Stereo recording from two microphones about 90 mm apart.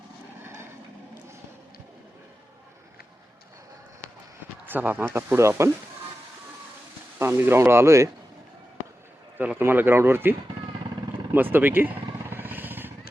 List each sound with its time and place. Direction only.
0.4 s vehicle: 25° right (ahead or behind)
4.6 s speech: 20° right (ahead or behind)
7.2 s speech: 25° right (ahead or behind)
9.4 s speech: 20° right (ahead or behind)
11.3 s vehicle: 25° right (ahead or behind)